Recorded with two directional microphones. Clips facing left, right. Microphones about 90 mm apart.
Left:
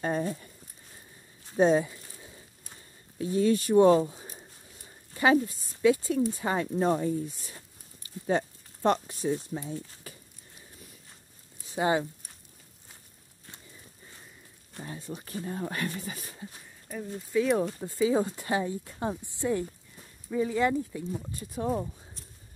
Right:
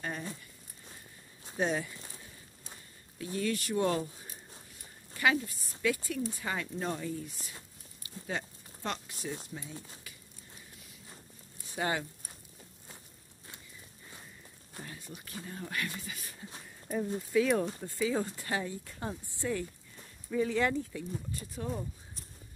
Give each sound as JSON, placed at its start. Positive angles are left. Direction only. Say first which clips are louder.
{"t": 0.0, "sound": "speech", "louder": "left 9 dB", "side_deg": 30}
{"t": 1.6, "sound": "speech", "louder": "left 9 dB", "side_deg": 25}
{"t": 3.2, "sound": "speech", "louder": "left 9 dB", "side_deg": 25}
{"t": 8.0, "sound": "a sound", "louder": "left 10 dB", "side_deg": 35}
{"t": 9.5, "sound": "speech", "louder": "left 9 dB", "side_deg": 35}
{"t": 10.1, "sound": "a sound", "louder": "left 6 dB", "side_deg": 40}
{"t": 11.6, "sound": "speech", "louder": "left 7 dB", "side_deg": 25}
{"t": 14.9, "sound": "speech", "louder": "left 12 dB", "side_deg": 30}
{"t": 16.8, "sound": "speech", "louder": "right 4 dB", "side_deg": -15}
{"t": 17.3, "sound": "speech", "louder": "left 3 dB", "side_deg": 10}
{"t": 17.7, "sound": "speech", "louder": "left 6 dB", "side_deg": 20}
{"t": 20.2, "sound": "speech", "louder": "left 3 dB", "side_deg": 10}
{"t": 21.5, "sound": "speech", "louder": "left 8 dB", "side_deg": 40}